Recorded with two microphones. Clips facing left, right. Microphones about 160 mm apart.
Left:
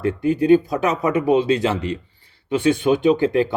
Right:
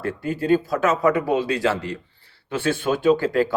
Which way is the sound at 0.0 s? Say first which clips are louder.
Left 6 dB; 20° left (ahead or behind).